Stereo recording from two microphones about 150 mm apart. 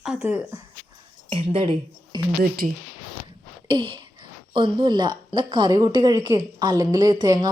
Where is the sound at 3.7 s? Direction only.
35° right (ahead or behind).